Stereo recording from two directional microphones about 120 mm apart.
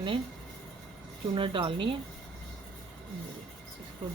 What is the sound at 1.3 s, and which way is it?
Speech, 45° right (ahead or behind).